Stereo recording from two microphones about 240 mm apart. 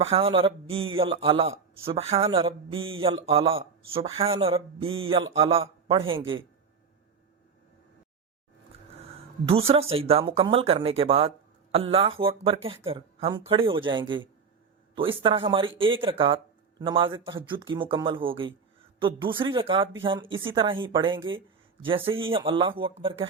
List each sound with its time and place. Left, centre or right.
0.0 s a man's voice: right
9.5 s a man's voice: right